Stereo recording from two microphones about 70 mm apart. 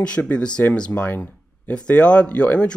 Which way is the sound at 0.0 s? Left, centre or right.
Centre.